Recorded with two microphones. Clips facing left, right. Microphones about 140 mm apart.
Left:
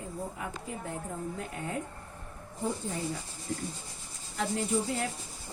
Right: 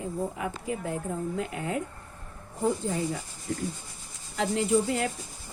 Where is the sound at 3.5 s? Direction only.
90° right.